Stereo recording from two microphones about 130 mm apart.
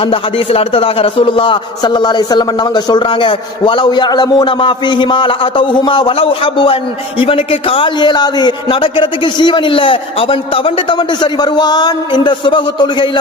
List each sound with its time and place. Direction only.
0.0 s a man's voice: 45° left (ahead or behind)